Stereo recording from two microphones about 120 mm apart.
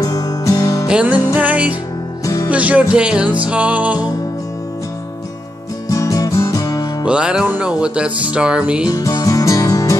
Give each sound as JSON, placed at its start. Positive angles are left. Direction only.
{"t": 0.0, "sound": "music", "side_deg": 30}
{"t": 0.8, "sound": "music", "side_deg": -10}
{"t": 5.9, "sound": "music", "side_deg": 30}
{"t": 7.1, "sound": "music", "side_deg": -5}
{"t": 8.8, "sound": "music", "side_deg": 35}